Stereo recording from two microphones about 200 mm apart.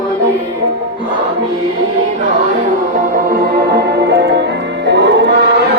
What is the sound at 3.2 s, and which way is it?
Music, 50° right (ahead or behind).